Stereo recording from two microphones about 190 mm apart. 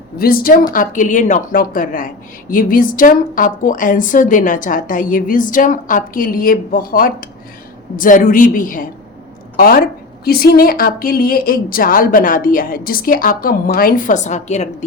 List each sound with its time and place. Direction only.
0.2 s a woman's voice: 50° left (ahead or behind)